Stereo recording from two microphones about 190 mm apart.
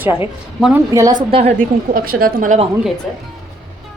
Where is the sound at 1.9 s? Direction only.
50° right (ahead or behind).